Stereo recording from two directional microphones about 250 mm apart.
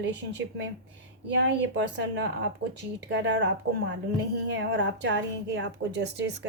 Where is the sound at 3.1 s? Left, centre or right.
Right.